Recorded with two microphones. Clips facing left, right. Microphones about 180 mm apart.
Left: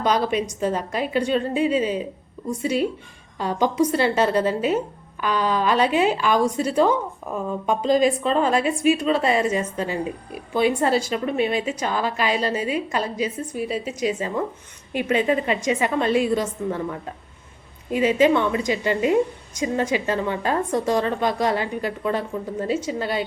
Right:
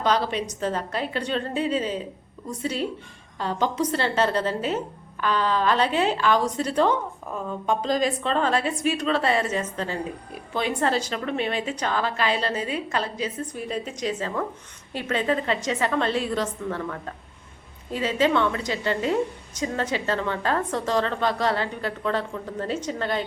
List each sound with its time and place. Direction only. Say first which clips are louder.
0.0 s a woman's voice: left 3 dB; 10° left (ahead or behind)